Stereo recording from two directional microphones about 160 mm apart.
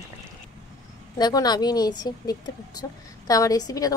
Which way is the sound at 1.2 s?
25° left (ahead or behind).